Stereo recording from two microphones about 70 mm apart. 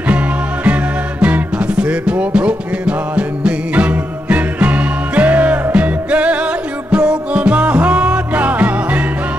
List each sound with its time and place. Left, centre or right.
1.2 s music: centre